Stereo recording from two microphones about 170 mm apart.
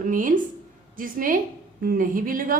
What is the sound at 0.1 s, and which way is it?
A woman's voice, 50° right (ahead or behind).